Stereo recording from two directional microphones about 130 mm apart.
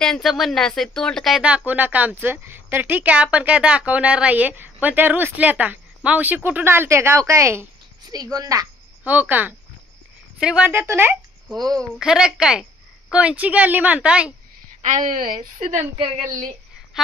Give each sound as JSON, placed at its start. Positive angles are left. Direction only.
{"t": 0.0, "sound": "speech", "side_deg": 0}
{"t": 1.4, "sound": "speech", "side_deg": -10}
{"t": 9.0, "sound": "speech", "side_deg": -15}
{"t": 11.5, "sound": "a woman's voice", "side_deg": -30}
{"t": 12.0, "sound": "speech", "side_deg": -5}
{"t": 14.8, "sound": "a woman's voice", "side_deg": -70}
{"t": 17.0, "sound": "speech", "side_deg": -5}